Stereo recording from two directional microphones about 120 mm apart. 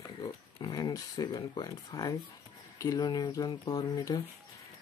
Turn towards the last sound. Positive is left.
turn(degrees=35)  # may be behind; listen again after turning